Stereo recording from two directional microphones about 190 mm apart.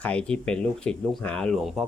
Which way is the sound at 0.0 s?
5° left (ahead or behind).